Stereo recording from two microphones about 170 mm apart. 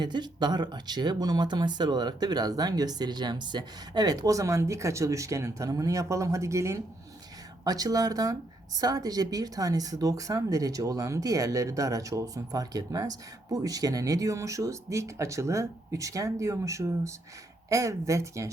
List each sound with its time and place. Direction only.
0.0 s speech: 25° right (ahead or behind)